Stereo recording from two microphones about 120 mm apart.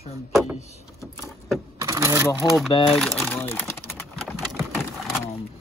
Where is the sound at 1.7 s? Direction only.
25° right (ahead or behind).